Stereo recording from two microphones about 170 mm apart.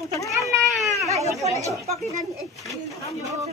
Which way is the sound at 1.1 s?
20° right (ahead or behind).